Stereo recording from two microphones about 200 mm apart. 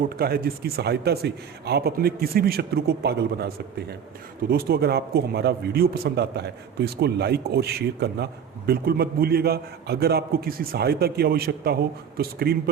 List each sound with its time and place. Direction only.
0.1 s a man's voice: 50° right (ahead or behind)